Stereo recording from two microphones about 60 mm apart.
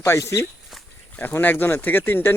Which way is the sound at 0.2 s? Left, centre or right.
Left.